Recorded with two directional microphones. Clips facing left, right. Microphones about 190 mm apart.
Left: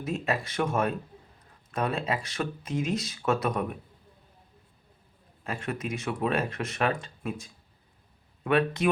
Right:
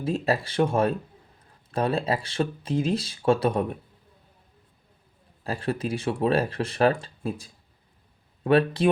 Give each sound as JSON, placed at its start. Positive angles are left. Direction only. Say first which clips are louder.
{"t": 0.0, "sound": "speech", "louder": "right 5 dB", "side_deg": -30}
{"t": 5.4, "sound": "speech", "louder": "right 5 dB", "side_deg": -35}